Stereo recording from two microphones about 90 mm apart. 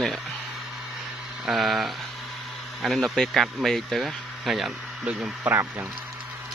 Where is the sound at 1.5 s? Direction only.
Centre (ahead or behind).